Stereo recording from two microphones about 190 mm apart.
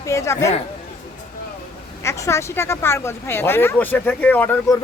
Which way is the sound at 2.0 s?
15° left (ahead or behind).